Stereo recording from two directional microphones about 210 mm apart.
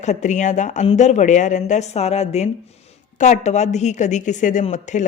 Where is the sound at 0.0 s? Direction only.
35° left (ahead or behind).